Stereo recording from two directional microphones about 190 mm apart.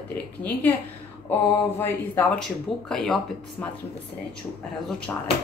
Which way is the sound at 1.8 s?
10° left (ahead or behind).